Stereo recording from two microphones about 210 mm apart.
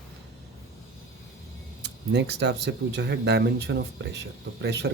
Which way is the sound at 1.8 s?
55° right (ahead or behind).